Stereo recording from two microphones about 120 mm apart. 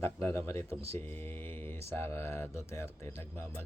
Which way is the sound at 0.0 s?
25° left (ahead or behind).